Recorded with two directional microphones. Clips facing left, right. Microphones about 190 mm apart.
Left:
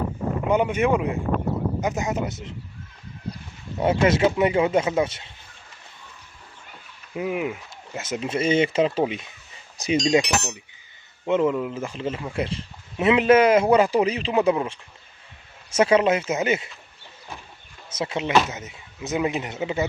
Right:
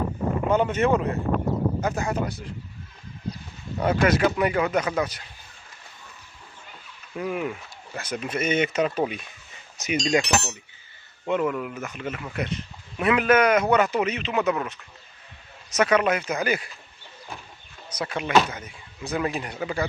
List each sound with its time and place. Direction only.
0.5 s speech: 15° left (ahead or behind)
3.8 s speech: 25° left (ahead or behind)
7.2 s speech: 15° left (ahead or behind)
17.8 s speech: 25° left (ahead or behind)